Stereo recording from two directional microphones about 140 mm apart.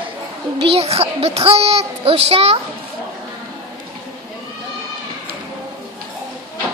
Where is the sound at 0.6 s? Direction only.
45° right (ahead or behind).